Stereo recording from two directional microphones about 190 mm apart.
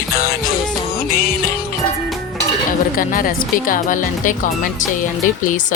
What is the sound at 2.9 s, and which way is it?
Speech, 45° left (ahead or behind).